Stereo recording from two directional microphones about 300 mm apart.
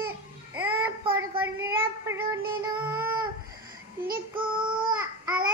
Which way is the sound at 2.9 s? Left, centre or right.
Centre.